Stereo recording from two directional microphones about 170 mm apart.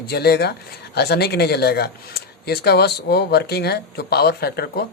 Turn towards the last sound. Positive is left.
turn(degrees=65)  # may be behind; listen again after turning